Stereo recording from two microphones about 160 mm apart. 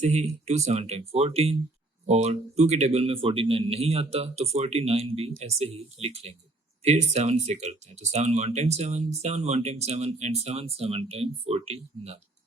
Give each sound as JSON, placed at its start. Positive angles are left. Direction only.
{"t": 0.0, "sound": "speech", "side_deg": -45}